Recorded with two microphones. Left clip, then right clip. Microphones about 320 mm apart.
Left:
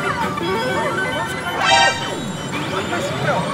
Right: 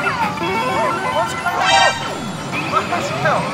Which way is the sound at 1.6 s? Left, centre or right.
Centre.